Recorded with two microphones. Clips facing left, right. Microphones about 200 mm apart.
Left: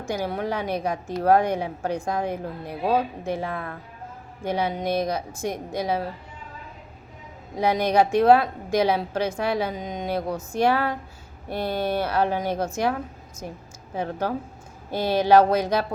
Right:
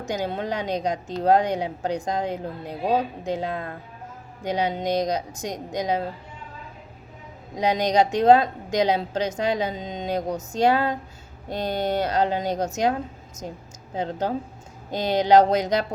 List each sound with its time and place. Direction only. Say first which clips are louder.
0.1 s a woman's voice: even; 20° right (ahead or behind)
7.5 s a woman's voice: even; 15° right (ahead or behind)
13.9 s a woman's voice: right 1 dB; 20° right (ahead or behind)